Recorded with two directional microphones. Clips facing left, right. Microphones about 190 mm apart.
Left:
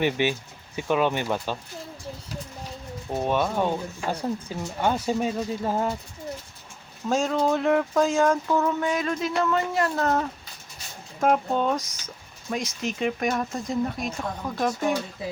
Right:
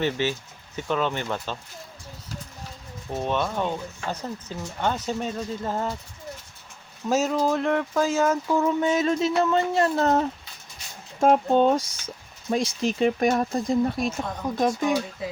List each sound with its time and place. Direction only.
0.0 s speech: 15° left (ahead or behind)
3.1 s speech: 10° left (ahead or behind)
7.1 s speech: 5° right (ahead or behind)
8.8 s speech: 25° right (ahead or behind)
14.5 s speech: 20° right (ahead or behind)